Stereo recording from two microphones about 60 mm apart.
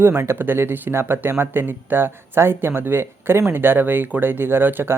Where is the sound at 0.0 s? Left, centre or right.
Right.